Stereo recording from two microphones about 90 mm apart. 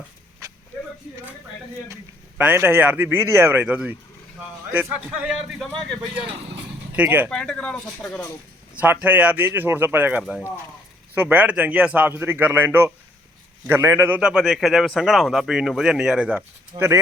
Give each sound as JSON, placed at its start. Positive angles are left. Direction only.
{"t": 2.4, "sound": "a man's voice", "side_deg": -20}
{"t": 6.9, "sound": "a man's voice", "side_deg": -20}
{"t": 7.3, "sound": "speech", "side_deg": 10}
{"t": 8.7, "sound": "a man's voice", "side_deg": -15}
{"t": 14.2, "sound": "speech", "side_deg": -10}
{"t": 16.7, "sound": "a man's voice", "side_deg": -25}